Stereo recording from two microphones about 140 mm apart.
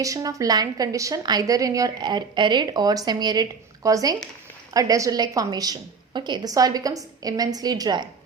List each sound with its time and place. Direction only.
0.0 s a woman's voice: 25° right (ahead or behind)